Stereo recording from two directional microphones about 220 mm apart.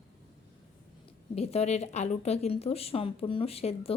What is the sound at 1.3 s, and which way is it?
Speech, 30° left (ahead or behind).